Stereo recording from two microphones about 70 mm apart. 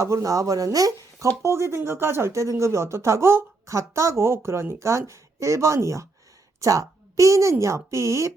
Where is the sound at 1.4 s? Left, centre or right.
Right.